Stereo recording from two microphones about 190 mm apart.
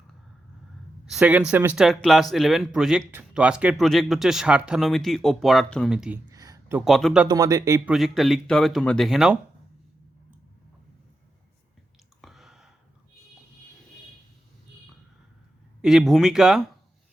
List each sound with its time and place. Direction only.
1.0 s a man's voice: 5° right (ahead or behind)
6.3 s a sound: 15° right (ahead or behind); by 7.3 s centre (ahead or behind)
7.3 s speech: 20° right (ahead or behind)
7.9 s a man's voice: centre (ahead or behind)
12.2 s a sound: centre (ahead or behind)
15.8 s a man's voice: centre (ahead or behind)